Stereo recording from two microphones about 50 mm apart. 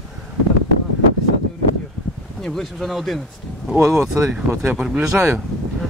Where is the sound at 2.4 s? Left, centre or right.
Centre.